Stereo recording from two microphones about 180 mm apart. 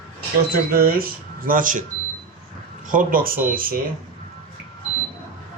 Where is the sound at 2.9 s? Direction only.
50° right (ahead or behind).